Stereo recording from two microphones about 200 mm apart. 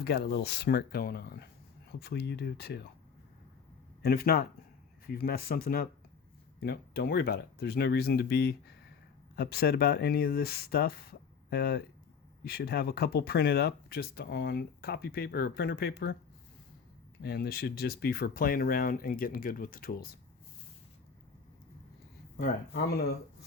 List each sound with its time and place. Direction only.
0.0 s speech: 55° left (ahead or behind)
4.0 s speech: 50° left (ahead or behind)
17.2 s speech: 50° left (ahead or behind)
22.7 s speech: 50° left (ahead or behind)